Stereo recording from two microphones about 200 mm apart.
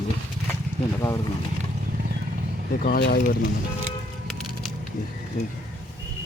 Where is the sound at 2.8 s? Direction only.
45° left (ahead or behind).